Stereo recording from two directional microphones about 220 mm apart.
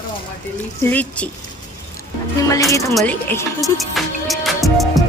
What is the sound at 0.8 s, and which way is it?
Speech, 10° left (ahead or behind).